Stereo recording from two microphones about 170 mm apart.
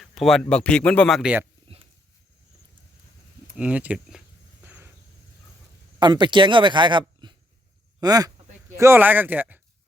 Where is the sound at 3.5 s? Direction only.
5° right (ahead or behind).